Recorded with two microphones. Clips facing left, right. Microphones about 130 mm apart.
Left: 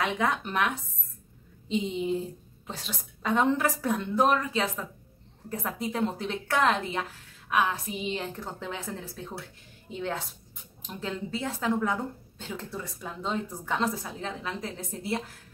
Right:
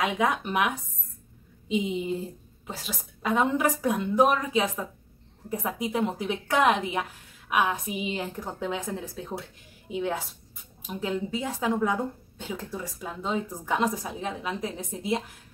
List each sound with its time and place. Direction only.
0.0 s a woman's voice: 10° right (ahead or behind)